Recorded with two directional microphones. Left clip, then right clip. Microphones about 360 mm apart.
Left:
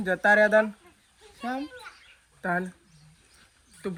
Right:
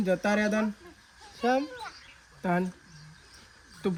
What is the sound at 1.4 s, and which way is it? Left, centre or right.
Speech, centre.